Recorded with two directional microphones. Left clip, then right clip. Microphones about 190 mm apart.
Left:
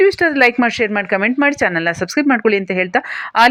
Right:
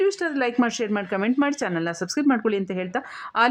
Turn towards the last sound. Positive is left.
turn(degrees=10)  # may be behind; listen again after turning